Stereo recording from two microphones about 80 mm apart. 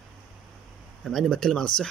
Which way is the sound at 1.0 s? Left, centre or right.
Centre.